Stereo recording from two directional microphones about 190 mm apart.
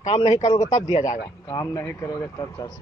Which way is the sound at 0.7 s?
20° left (ahead or behind).